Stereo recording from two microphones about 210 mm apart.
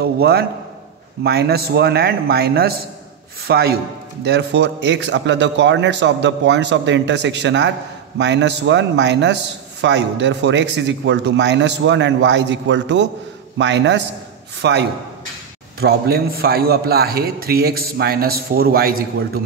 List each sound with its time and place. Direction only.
0.0 s a man's voice: 50° right (ahead or behind)